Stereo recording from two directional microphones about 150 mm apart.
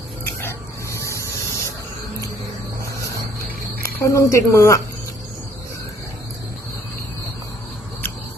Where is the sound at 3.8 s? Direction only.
20° left (ahead or behind).